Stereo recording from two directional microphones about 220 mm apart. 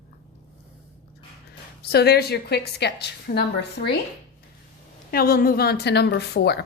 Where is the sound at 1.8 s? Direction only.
45° left (ahead or behind).